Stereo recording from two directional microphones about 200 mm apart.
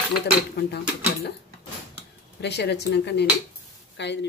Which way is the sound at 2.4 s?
55° left (ahead or behind).